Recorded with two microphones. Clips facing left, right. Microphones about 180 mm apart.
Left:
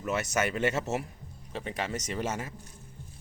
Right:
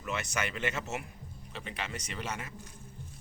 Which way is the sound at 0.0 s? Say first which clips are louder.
Left 6 dB; 40° left (ahead or behind).